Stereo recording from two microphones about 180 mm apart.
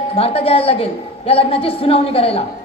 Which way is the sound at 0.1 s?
35° left (ahead or behind).